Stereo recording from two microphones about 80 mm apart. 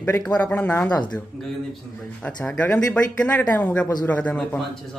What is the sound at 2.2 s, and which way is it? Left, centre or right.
Speech, centre.